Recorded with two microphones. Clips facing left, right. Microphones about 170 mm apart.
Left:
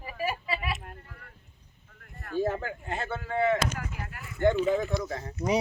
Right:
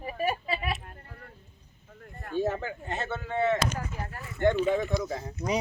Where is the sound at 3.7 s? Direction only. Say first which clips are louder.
Right 2 dB; 35° right (ahead or behind).